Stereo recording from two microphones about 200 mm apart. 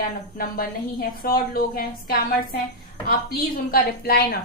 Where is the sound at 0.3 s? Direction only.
45° left (ahead or behind).